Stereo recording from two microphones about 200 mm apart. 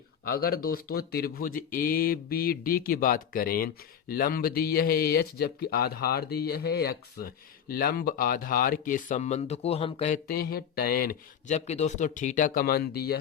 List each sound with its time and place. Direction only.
0.3 s speech: 50° left (ahead or behind); by 10.2 s 30° left (ahead or behind)
10.2 s speech: 50° left (ahead or behind)
11.5 s speech: 35° left (ahead or behind); by 13.1 s 50° left (ahead or behind)